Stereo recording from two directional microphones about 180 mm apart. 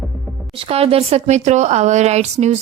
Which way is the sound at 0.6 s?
35° right (ahead or behind).